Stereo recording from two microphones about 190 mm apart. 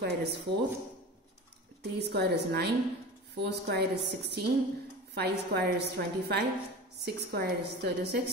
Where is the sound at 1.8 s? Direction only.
60° right (ahead or behind).